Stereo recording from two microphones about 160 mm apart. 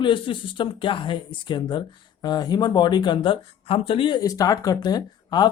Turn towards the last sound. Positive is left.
turn(degrees=25)  # may be behind; listen again after turning